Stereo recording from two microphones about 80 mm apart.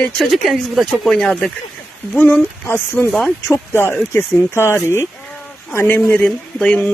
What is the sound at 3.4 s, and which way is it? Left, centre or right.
Speech, left.